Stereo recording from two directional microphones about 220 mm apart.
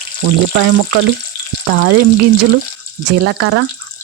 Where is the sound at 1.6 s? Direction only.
60° right (ahead or behind).